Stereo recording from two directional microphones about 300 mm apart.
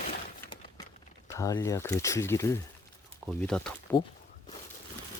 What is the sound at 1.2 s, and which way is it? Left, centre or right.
Speech, centre.